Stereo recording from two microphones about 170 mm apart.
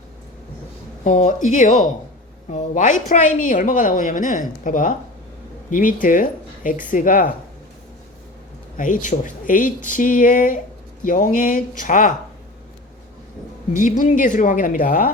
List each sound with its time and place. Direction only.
1.0 s a woman's voice: 45° left (ahead or behind)
8.8 s a woman's voice: 50° left (ahead or behind)
13.7 s a woman's voice: 50° left (ahead or behind)